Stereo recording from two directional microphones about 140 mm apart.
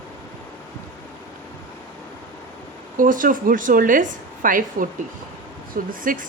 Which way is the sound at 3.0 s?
75° right (ahead or behind).